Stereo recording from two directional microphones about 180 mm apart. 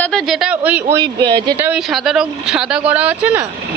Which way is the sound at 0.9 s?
20° right (ahead or behind).